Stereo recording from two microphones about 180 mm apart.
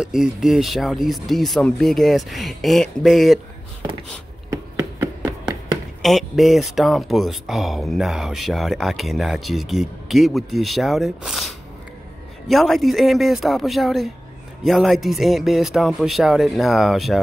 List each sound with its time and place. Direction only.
0.0 s speech: 5° right (ahead or behind)
4.5 s a sound: 15° right (ahead or behind)
6.0 s speech: centre (ahead or behind)